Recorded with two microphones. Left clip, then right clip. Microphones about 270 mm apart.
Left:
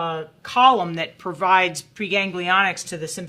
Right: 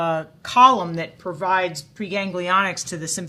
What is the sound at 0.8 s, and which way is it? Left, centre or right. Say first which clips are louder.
Speech: left 2 dB; left.